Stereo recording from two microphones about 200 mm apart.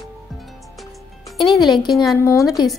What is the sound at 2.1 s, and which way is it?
Speech, 15° left (ahead or behind).